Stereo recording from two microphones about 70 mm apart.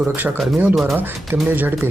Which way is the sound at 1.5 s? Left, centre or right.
Right.